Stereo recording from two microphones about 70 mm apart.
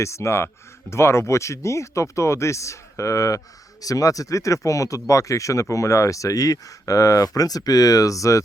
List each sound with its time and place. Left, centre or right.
0.0 s speech: left